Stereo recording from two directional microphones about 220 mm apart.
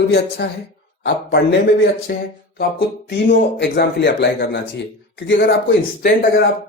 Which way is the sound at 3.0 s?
50° left (ahead or behind).